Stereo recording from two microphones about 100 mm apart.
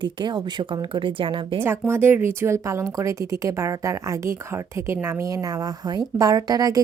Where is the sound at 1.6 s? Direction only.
25° right (ahead or behind).